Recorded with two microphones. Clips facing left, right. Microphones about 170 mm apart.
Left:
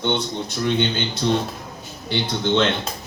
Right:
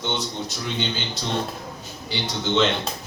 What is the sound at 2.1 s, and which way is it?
Speech, 55° left (ahead or behind).